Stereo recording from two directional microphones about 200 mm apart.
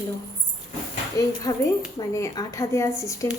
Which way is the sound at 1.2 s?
15° left (ahead or behind).